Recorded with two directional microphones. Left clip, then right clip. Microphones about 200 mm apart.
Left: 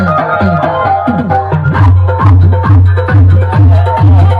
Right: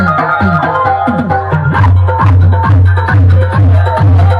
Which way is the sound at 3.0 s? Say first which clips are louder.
Right 1 dB; 40° right (ahead or behind).